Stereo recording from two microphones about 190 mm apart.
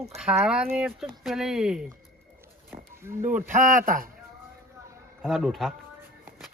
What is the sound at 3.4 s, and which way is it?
Speech, 40° right (ahead or behind).